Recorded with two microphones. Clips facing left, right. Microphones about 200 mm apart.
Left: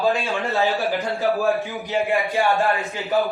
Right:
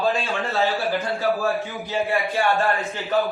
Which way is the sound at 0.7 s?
15° left (ahead or behind).